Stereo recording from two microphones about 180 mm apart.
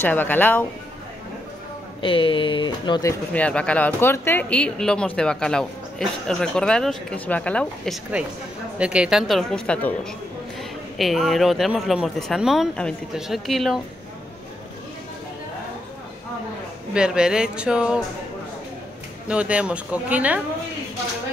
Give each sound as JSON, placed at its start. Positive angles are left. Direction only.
{"t": 0.0, "sound": "speech", "side_deg": 10}
{"t": 2.0, "sound": "speech", "side_deg": 30}
{"t": 3.3, "sound": "speech", "side_deg": 5}
{"t": 11.0, "sound": "speech", "side_deg": 0}
{"t": 16.9, "sound": "speech", "side_deg": -5}
{"t": 19.2, "sound": "speech", "side_deg": -5}